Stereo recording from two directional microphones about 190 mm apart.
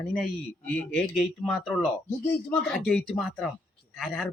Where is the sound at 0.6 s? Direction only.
5° left (ahead or behind).